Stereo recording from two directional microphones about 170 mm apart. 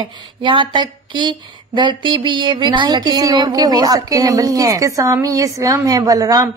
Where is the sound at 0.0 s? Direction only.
30° right (ahead or behind).